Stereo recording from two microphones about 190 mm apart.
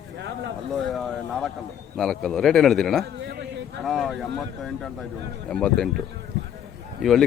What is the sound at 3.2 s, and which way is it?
Speech, 65° right (ahead or behind).